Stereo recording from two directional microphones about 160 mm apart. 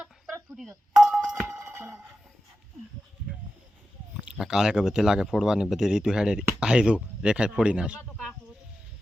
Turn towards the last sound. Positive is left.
turn(degrees=-5)  # may be behind; listen again after turning